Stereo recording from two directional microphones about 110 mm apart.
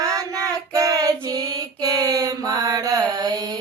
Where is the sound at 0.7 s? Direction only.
35° right (ahead or behind).